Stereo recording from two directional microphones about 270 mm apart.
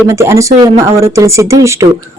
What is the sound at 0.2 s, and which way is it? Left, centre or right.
Speech, centre.